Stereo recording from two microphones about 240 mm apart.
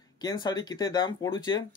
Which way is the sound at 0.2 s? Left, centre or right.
Centre.